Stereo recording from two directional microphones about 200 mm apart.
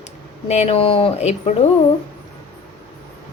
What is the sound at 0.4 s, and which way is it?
A woman's voice, 30° left (ahead or behind).